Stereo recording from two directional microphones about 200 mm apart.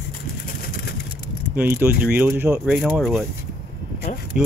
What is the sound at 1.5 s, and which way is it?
Speech, 10° right (ahead or behind).